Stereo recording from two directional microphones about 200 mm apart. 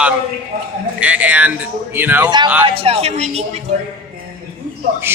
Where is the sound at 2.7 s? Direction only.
30° right (ahead or behind).